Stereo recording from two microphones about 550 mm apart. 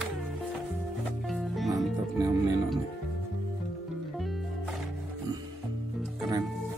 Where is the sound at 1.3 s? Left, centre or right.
Centre.